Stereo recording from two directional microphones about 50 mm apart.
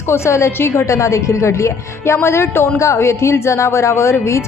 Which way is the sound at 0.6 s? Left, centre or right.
Left.